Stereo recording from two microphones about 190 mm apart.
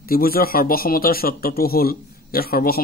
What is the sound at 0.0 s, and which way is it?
Speech, 50° left (ahead or behind).